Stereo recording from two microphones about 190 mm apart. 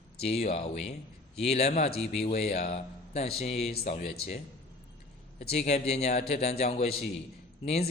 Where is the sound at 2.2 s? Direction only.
35° left (ahead or behind).